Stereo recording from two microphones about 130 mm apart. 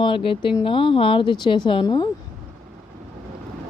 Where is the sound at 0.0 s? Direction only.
40° left (ahead or behind).